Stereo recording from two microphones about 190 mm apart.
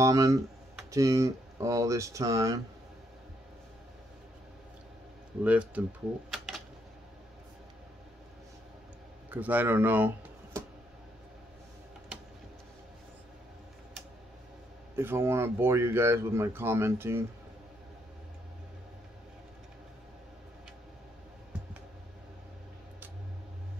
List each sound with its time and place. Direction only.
0.0 s speech: 15° right (ahead or behind)
5.4 s speech: 5° right (ahead or behind)
6.3 s a sound: centre (ahead or behind)
9.3 s speech: 10° right (ahead or behind)
15.0 s speech: 10° right (ahead or behind)